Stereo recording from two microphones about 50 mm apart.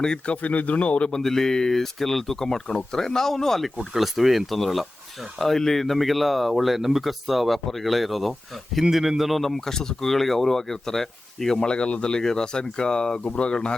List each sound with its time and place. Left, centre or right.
0.0 s speech: centre
0.4 s speech: left
1.1 s speech: centre